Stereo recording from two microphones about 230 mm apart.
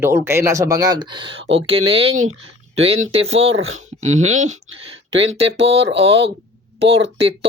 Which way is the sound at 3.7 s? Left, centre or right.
Right.